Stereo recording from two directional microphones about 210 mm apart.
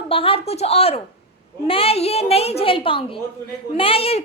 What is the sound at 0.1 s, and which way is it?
A woman's voice, 25° left (ahead or behind).